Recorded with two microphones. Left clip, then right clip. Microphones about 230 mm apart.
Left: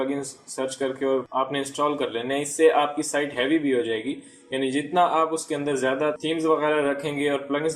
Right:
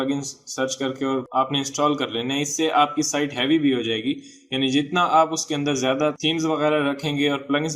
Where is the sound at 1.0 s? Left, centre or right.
Right.